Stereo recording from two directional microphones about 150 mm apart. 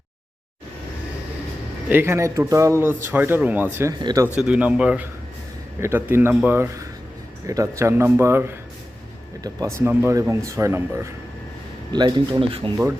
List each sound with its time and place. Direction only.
1.9 s a man's voice: 15° right (ahead or behind)
4.4 s a man's voice: 5° right (ahead or behind)
11.9 s speech: 30° right (ahead or behind)